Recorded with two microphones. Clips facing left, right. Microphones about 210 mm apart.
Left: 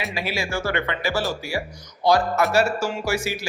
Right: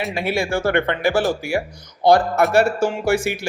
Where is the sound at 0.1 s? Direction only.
55° right (ahead or behind).